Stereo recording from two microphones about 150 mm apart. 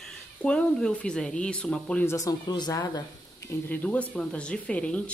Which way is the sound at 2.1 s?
25° left (ahead or behind).